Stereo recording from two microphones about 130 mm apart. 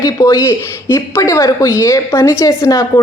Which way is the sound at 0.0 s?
25° left (ahead or behind).